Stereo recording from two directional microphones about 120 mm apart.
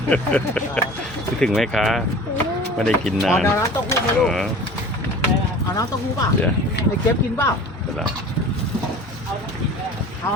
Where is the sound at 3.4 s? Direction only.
25° left (ahead or behind).